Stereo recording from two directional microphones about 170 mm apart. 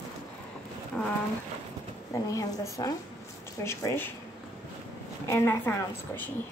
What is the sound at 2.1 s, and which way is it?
A woman's voice, 20° left (ahead or behind).